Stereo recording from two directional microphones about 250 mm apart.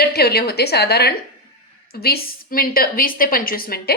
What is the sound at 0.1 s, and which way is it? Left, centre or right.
A woman's voice, left.